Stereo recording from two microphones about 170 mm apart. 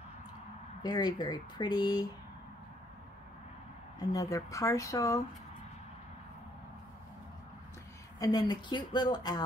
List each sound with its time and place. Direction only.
0.8 s speech: 25° left (ahead or behind)
4.0 s speech: 20° left (ahead or behind)
8.2 s speech: 20° left (ahead or behind)